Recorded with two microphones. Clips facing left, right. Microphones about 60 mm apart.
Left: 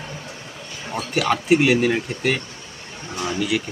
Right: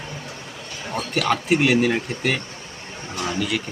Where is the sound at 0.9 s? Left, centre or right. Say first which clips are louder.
Left 1 dB; centre.